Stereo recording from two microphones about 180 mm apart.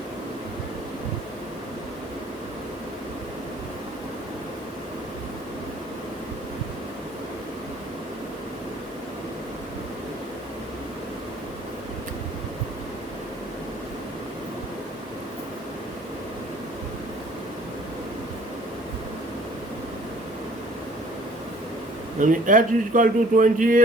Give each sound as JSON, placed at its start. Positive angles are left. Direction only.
{"t": 22.2, "sound": "a man's voice", "side_deg": -45}